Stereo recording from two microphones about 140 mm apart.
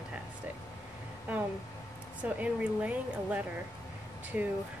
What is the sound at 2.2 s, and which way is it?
Speech, 10° right (ahead or behind).